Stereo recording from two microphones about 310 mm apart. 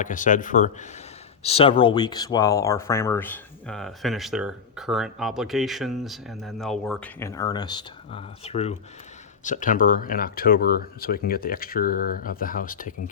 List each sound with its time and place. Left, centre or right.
0.0 s speech: left